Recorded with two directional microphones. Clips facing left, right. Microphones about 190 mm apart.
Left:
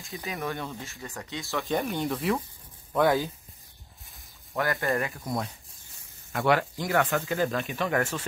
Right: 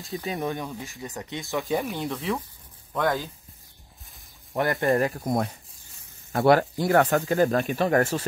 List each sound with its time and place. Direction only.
0.1 s speech: 35° right (ahead or behind)
0.4 s speech: 15° right (ahead or behind)
1.7 s speech: 5° right (ahead or behind)
4.6 s speech: 20° right (ahead or behind)
4.9 s speech: 40° right (ahead or behind)
6.3 s speech: 40° right (ahead or behind)